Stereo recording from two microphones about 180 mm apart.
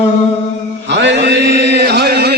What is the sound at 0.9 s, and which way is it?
Chant, 70° right (ahead or behind).